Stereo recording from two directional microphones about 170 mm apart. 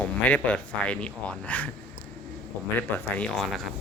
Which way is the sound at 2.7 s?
5° left (ahead or behind).